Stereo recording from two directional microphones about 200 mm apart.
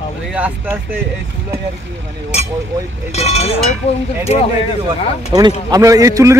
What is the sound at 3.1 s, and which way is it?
Speech, 30° left (ahead or behind).